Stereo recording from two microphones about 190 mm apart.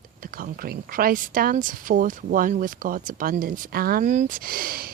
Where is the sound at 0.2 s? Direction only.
50° right (ahead or behind).